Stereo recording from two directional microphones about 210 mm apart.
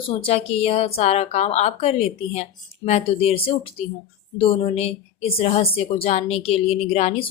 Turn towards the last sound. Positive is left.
turn(degrees=30)  # may be behind; listen again after turning